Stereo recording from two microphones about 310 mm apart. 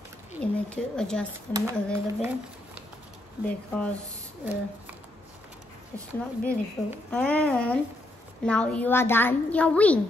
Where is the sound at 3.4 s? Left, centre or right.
Centre.